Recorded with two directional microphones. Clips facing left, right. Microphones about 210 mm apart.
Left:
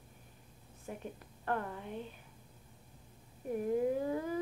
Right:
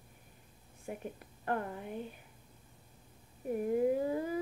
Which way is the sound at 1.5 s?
10° right (ahead or behind).